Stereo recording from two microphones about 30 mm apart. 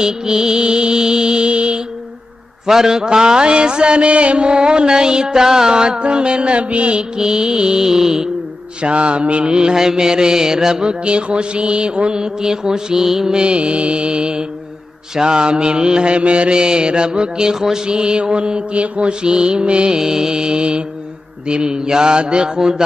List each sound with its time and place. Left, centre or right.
0.0 s music: right
2.6 s mantra: centre; by 7.0 s right
7.0 s music: right
8.8 s mantra: right
9.6 s music: right
10.9 s mantra: right; by 13.3 s centre
13.3 s mantra: right
20.0 s music: centre